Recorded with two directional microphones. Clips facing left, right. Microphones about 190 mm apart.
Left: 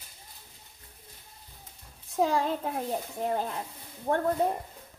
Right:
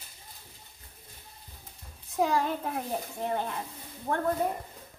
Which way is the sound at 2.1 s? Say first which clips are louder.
Left 1 dB; 30° left (ahead or behind).